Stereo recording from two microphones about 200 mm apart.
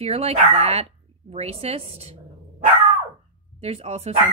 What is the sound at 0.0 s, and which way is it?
Speech, 30° right (ahead or behind).